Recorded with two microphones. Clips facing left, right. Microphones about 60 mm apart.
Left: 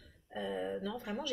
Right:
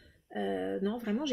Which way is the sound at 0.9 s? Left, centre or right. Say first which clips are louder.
Right 6 dB; right.